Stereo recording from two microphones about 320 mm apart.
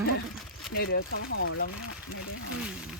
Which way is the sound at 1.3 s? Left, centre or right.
Left.